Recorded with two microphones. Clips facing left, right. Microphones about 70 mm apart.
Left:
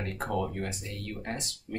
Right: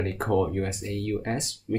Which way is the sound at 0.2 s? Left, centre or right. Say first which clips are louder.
Right 7 dB; right.